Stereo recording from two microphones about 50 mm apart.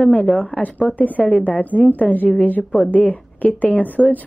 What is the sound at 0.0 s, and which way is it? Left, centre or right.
A woman's voice, left.